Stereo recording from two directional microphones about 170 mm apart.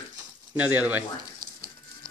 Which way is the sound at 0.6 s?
10° right (ahead or behind).